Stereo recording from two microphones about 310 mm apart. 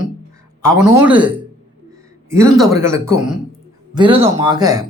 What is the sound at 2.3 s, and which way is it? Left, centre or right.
Speech, centre.